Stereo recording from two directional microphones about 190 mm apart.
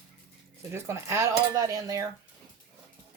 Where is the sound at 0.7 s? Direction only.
15° right (ahead or behind).